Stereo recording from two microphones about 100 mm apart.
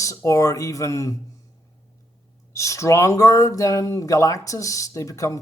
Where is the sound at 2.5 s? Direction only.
30° left (ahead or behind).